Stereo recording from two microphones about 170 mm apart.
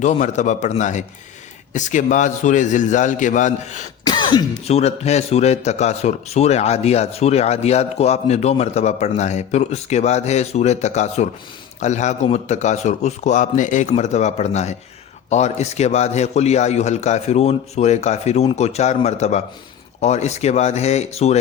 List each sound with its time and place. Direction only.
0.0 s a man's voice: 45° left (ahead or behind)
4.0 s throat clearing: 25° left (ahead or behind)
4.6 s a man's voice: 40° left (ahead or behind)